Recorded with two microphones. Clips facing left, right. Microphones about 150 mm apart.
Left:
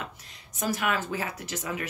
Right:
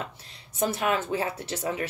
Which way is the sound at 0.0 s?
30° right (ahead or behind).